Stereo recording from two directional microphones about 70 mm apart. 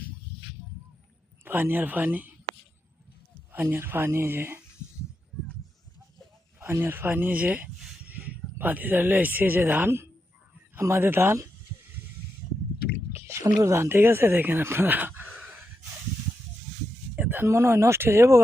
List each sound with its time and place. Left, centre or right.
1.5 s speech: right
3.5 s speech: right
6.6 s speech: right
10.8 s speech: right
13.1 s a sound: right
13.7 s speech: right
17.2 s a sound: right
17.5 s speech: right